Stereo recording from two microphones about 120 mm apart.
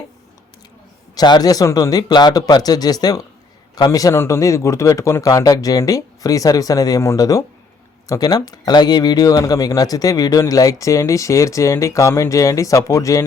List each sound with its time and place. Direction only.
1.1 s speech: 35° left (ahead or behind)